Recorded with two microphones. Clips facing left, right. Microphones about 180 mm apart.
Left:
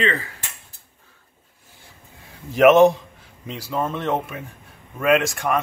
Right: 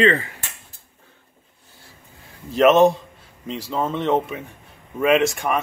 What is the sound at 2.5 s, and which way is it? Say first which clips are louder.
Speech: left 1 dB; 10° left (ahead or behind).